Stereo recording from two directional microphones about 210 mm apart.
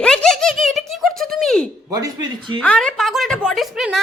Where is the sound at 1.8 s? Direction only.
15° right (ahead or behind).